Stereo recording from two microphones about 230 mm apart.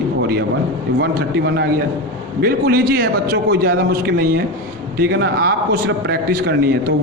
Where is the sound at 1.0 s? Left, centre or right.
Right.